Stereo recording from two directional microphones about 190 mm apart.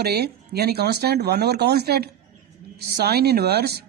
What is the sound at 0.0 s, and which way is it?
Speech, 55° right (ahead or behind).